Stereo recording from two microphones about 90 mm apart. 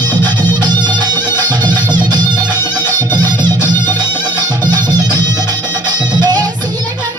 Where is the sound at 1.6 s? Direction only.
55° right (ahead or behind).